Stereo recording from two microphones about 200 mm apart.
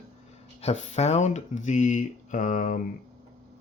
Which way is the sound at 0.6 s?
30° left (ahead or behind).